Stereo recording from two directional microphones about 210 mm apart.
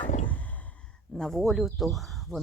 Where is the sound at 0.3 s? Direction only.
5° left (ahead or behind).